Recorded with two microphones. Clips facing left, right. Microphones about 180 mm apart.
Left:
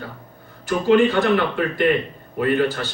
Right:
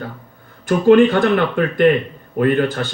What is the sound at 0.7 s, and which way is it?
Speech, 50° right (ahead or behind).